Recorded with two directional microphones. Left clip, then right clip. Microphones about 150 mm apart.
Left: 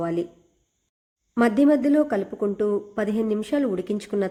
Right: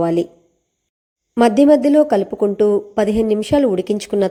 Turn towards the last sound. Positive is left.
turn(degrees=-25)  # may be behind; listen again after turning